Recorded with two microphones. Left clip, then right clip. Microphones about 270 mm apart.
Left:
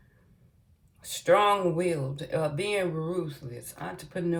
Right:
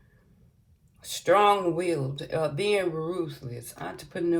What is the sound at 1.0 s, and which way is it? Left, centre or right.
Speech, centre.